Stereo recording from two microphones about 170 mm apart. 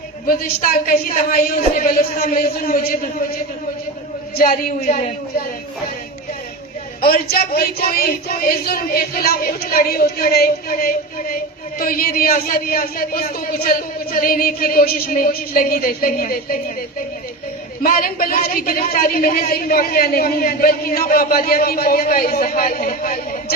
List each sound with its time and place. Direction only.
0.4 s a woman's voice: 60° left (ahead or behind)
4.4 s a woman's voice: 55° left (ahead or behind)
7.0 s a woman's voice: 60° left (ahead or behind)
17.8 s a woman's voice: 55° left (ahead or behind)